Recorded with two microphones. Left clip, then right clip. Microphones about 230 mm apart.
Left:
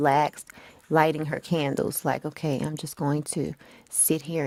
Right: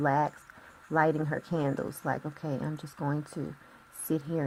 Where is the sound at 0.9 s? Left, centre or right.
Left.